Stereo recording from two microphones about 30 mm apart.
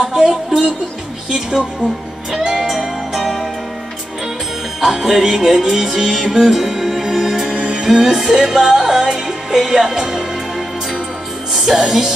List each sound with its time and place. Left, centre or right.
0.0 s music: centre
0.5 s speech: right
2.4 s music: centre
4.7 s music: centre
7.5 s music: right
7.8 s music: centre
11.5 s music: centre